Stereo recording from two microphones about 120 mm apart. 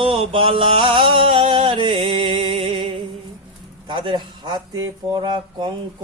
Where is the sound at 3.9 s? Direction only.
40° right (ahead or behind).